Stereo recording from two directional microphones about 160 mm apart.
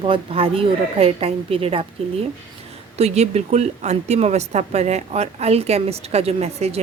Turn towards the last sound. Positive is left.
turn(degrees=-40)  # may be behind; listen again after turning